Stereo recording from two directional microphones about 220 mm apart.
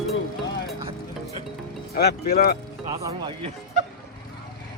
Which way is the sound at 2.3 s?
40° left (ahead or behind).